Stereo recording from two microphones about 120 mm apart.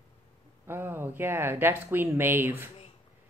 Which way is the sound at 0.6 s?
20° right (ahead or behind).